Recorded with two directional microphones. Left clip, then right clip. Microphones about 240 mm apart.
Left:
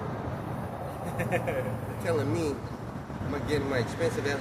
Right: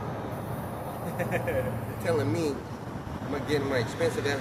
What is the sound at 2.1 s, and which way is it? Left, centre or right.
Speech, centre.